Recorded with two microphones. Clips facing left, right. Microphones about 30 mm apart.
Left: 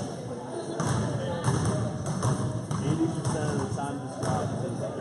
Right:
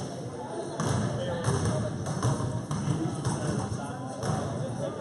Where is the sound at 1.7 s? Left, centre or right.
Centre.